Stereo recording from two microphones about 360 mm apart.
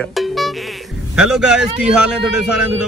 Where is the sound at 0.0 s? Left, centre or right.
Centre.